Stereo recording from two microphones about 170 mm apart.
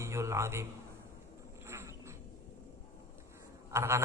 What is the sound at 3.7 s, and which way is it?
Mantra, 15° right (ahead or behind).